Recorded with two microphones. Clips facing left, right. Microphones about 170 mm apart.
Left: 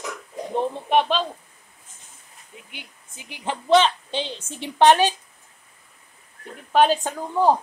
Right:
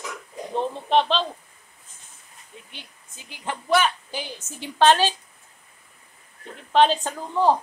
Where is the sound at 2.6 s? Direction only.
15° left (ahead or behind).